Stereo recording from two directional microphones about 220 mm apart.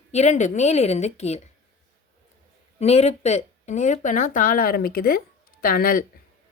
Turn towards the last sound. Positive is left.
turn(degrees=40)  # may be behind; listen again after turning